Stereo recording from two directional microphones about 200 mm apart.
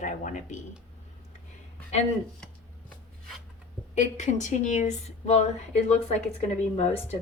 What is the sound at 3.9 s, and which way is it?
Speech, 35° left (ahead or behind).